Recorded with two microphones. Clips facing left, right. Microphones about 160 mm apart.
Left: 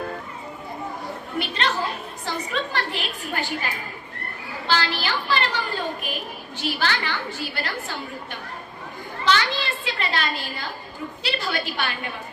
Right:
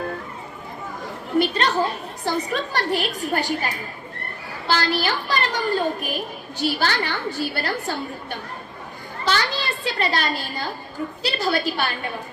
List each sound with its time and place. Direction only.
1.4 s a child's voice: 40° right (ahead or behind)
4.7 s a child's voice: 40° right (ahead or behind)
9.2 s a child's voice: 40° right (ahead or behind)